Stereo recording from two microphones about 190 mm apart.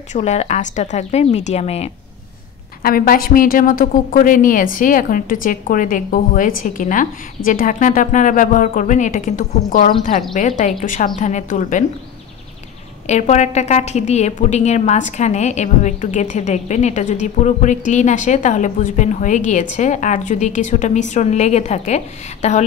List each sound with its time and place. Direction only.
0.1 s a woman's voice: 35° left (ahead or behind)
2.8 s a woman's voice: 50° left (ahead or behind)
13.0 s a woman's voice: 35° left (ahead or behind)